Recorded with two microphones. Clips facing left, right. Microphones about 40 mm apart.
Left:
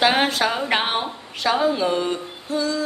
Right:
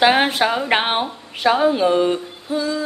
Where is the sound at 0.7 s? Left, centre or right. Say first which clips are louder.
Right 3 dB; right.